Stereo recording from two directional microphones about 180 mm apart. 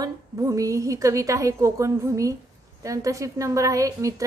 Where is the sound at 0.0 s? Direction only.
20° right (ahead or behind).